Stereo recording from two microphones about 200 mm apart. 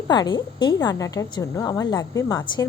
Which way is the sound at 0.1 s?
20° left (ahead or behind).